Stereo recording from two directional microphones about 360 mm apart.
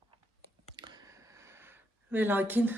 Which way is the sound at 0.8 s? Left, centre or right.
Centre.